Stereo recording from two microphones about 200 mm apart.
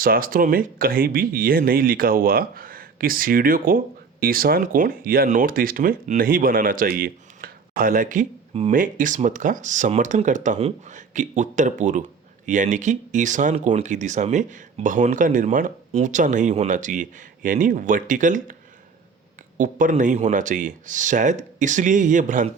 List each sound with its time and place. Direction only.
0.0 s speech: 45° right (ahead or behind)
19.5 s speech: 40° right (ahead or behind)